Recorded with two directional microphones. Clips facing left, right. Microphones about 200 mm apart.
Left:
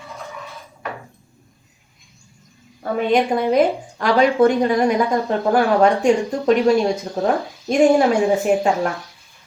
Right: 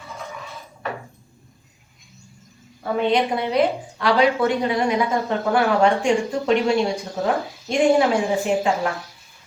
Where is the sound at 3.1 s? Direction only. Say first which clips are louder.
Left 7 dB; 45° left (ahead or behind).